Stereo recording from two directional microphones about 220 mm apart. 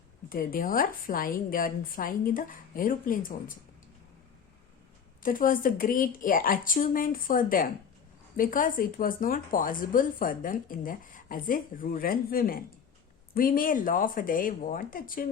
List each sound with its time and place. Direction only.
0.3 s a woman's voice: 40° left (ahead or behind)
5.2 s a woman's voice: 40° left (ahead or behind)